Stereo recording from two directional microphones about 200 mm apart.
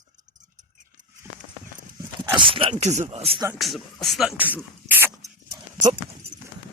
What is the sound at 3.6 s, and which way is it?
Speech, centre (ahead or behind).